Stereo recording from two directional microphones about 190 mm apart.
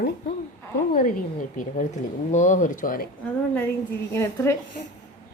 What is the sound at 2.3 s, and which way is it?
Speech, 40° left (ahead or behind).